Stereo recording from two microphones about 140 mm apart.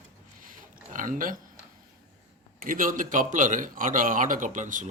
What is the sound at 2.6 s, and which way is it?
A man's voice, 75° right (ahead or behind).